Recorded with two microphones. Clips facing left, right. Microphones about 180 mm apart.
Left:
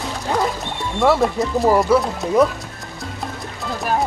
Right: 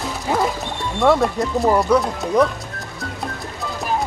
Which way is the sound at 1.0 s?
Centre (ahead or behind).